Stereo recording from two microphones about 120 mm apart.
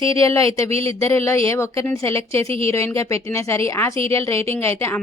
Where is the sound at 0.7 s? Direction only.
55° right (ahead or behind).